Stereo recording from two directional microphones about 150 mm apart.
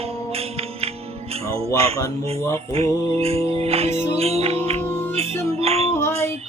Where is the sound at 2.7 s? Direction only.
45° right (ahead or behind).